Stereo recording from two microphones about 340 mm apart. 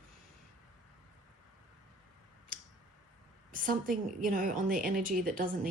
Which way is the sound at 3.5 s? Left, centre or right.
Right.